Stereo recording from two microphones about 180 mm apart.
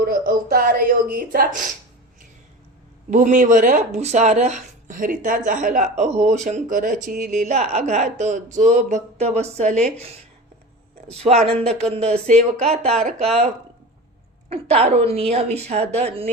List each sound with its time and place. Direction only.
0.0 s speech: 55° right (ahead or behind)
3.1 s speech: 45° right (ahead or behind)
11.1 s speech: 35° right (ahead or behind)
14.5 s speech: 35° right (ahead or behind)